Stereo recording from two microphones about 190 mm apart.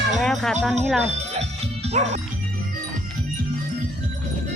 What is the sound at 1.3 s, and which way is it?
Music, 35° right (ahead or behind).